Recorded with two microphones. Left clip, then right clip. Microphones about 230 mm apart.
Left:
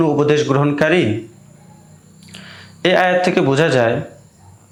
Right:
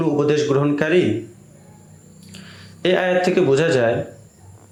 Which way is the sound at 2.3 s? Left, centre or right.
Left.